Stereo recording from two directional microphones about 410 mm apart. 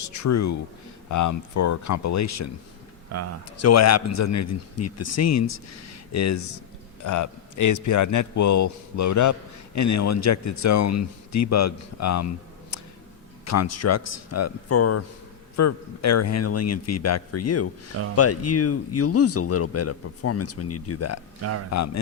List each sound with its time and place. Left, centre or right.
0.0 s a man's voice: left
3.1 s speech: right
3.6 s a man's voice: left
13.4 s speech: left